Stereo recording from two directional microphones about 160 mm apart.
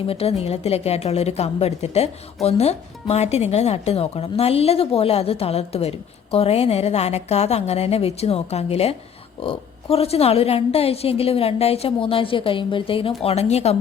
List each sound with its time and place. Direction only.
0.0 s a woman's voice: 35° left (ahead or behind)